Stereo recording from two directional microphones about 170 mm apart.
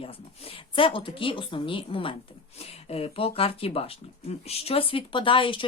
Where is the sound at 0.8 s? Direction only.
30° left (ahead or behind).